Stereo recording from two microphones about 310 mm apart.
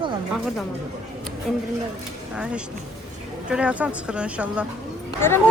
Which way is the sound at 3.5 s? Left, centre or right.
Centre.